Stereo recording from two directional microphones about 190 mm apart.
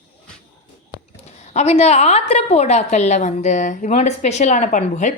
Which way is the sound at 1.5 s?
35° left (ahead or behind).